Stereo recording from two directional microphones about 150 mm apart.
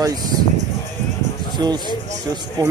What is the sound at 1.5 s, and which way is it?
Speech, 30° right (ahead or behind).